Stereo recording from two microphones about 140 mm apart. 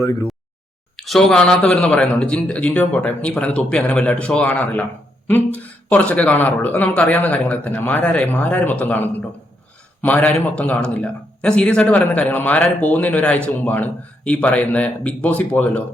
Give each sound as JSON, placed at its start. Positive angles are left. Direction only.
{"t": 0.9, "sound": "a man's voice", "side_deg": 0}